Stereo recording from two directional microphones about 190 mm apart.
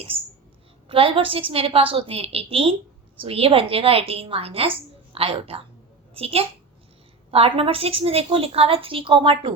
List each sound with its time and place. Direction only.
0.1 s a woman's voice: 30° right (ahead or behind)